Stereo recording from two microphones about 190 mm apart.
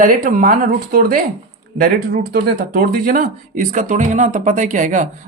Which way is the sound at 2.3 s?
50° right (ahead or behind).